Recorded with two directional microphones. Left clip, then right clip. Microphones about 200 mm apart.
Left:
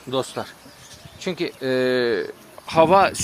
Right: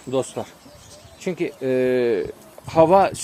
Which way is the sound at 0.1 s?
10° right (ahead or behind).